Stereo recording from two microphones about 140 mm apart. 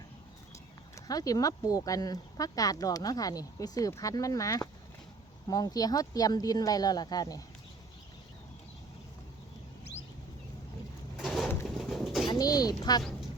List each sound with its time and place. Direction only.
0.9 s speech: 25° left (ahead or behind)
11.2 s a sound: centre (ahead or behind)
12.3 s speech: 25° left (ahead or behind)